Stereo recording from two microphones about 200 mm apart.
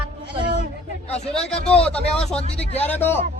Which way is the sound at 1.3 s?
5° left (ahead or behind).